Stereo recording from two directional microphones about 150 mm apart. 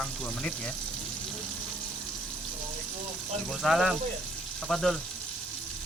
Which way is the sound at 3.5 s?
Centre (ahead or behind).